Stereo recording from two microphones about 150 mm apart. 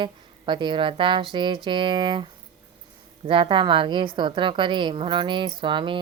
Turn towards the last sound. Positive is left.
turn(degrees=-35)  # may be behind; listen again after turning